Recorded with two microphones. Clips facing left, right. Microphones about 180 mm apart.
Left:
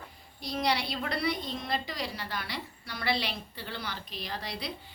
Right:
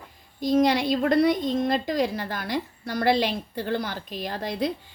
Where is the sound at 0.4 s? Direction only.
50° right (ahead or behind).